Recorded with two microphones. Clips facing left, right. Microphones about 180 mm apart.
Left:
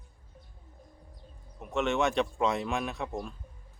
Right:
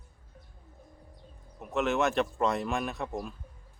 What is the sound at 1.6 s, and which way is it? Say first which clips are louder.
A man's voice: even; centre (ahead or behind).